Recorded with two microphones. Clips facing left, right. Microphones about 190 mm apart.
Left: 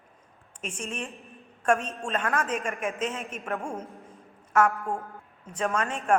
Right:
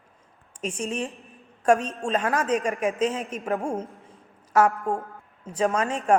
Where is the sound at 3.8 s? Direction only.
Centre (ahead or behind).